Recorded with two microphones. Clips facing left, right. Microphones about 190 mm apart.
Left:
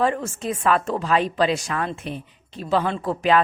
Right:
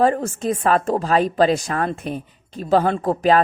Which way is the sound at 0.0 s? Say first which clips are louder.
Right 4 dB; 40° right (ahead or behind).